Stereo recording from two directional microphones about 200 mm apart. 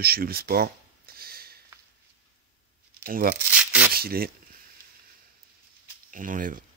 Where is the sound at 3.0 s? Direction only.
45° right (ahead or behind).